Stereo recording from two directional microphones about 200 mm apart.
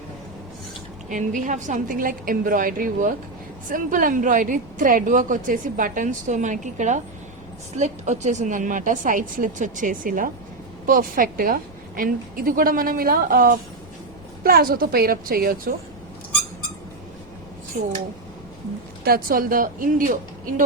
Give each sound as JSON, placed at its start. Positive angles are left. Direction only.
{"t": 1.1, "sound": "a woman's voice", "side_deg": -40}
{"t": 17.7, "sound": "a woman's voice", "side_deg": -40}
{"t": 19.0, "sound": "a woman's voice", "side_deg": -50}